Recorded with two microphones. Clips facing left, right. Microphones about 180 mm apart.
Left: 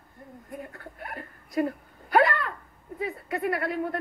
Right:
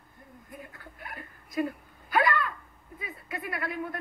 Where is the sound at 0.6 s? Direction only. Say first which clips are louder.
Left 5 dB; 45° left (ahead or behind).